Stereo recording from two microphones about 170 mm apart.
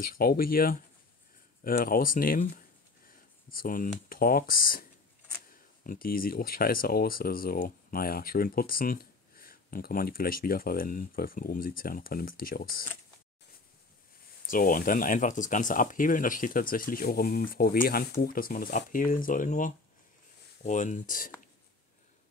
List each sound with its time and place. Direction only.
0.0 s speech: 60° left (ahead or behind)
14.4 s speech: 55° left (ahead or behind)